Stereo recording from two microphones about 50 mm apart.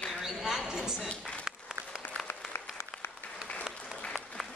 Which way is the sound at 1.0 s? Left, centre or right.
Centre.